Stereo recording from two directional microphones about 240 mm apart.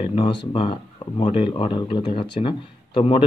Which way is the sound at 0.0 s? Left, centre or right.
Left.